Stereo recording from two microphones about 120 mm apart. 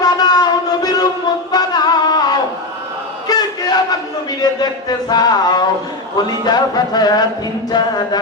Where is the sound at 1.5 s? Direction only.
35° left (ahead or behind).